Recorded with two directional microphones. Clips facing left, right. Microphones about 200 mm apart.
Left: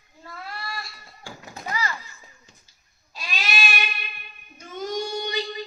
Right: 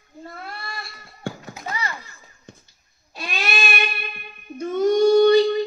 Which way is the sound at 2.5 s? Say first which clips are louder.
Right 12 dB; 60° right (ahead or behind).